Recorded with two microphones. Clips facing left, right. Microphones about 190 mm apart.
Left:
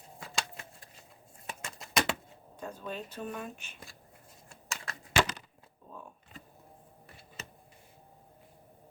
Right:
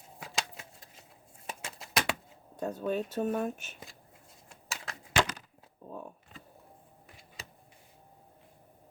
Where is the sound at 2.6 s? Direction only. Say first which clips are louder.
Right 8 dB; 45° right (ahead or behind).